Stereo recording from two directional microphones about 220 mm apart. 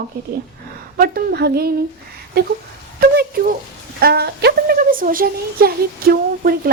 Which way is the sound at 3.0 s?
45° right (ahead or behind).